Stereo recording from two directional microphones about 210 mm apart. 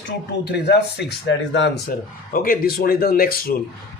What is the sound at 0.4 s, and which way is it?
Speech, 50° left (ahead or behind).